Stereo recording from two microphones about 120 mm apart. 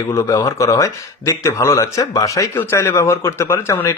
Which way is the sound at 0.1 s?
25° left (ahead or behind).